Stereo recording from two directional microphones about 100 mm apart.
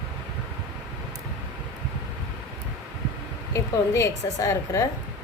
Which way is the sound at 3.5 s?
30° left (ahead or behind).